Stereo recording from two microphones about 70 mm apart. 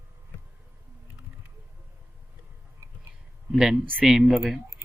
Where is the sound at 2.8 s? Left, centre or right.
Right.